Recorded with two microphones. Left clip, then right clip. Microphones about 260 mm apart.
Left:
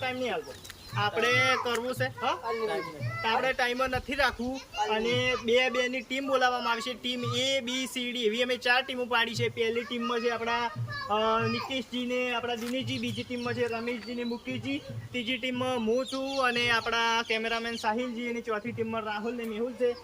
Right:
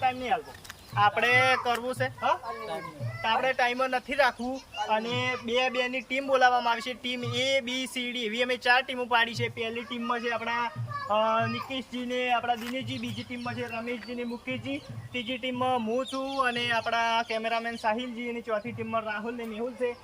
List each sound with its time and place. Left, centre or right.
0.0 s speech: centre
2.5 s a child's voice: centre
3.2 s speech: centre